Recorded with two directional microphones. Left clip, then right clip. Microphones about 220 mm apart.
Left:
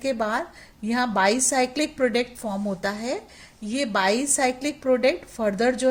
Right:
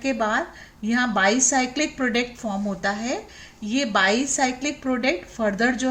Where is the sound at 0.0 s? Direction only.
50° left (ahead or behind).